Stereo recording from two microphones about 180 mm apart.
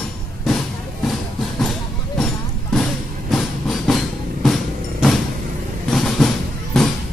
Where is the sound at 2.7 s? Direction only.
Centre (ahead or behind).